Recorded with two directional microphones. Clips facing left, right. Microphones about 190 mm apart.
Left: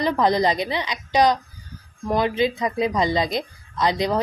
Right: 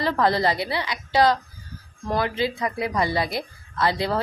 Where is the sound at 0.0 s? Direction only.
15° left (ahead or behind).